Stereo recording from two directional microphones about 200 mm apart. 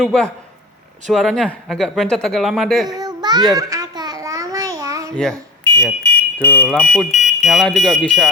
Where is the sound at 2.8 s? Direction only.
20° right (ahead or behind).